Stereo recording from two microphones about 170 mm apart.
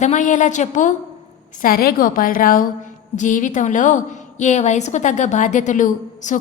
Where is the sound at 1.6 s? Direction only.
60° left (ahead or behind).